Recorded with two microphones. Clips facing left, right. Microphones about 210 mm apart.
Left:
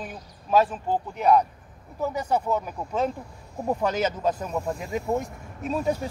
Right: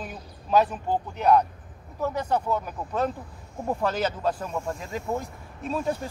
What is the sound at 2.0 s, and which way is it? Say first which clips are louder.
A man's voice: left 1 dB; 10° left (ahead or behind).